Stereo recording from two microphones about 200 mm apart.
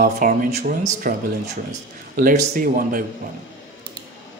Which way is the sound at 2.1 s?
45° right (ahead or behind).